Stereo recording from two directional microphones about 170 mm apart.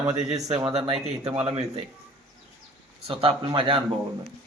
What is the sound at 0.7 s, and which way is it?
Speech, 35° right (ahead or behind).